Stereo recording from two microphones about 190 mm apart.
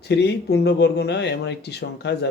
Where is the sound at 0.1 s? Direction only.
65° left (ahead or behind).